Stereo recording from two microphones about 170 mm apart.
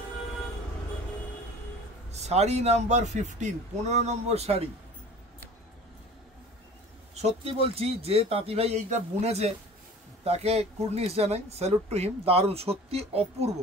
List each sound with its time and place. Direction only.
2.0 s speech: 40° right (ahead or behind)
7.2 s speech: 40° right (ahead or behind)